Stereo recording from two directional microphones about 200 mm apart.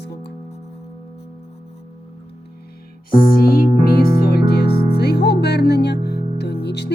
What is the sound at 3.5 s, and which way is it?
Music, 50° left (ahead or behind).